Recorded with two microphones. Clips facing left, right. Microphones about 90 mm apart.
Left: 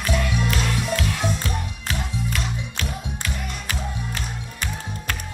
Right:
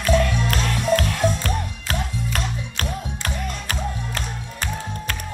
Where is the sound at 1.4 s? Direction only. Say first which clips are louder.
Right 2 dB; 50° right (ahead or behind).